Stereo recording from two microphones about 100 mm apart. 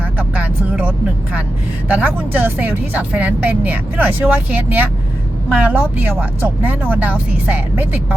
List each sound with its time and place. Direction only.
0.2 s vehicle: 15° right (ahead or behind)
1.9 s speech: 15° right (ahead or behind)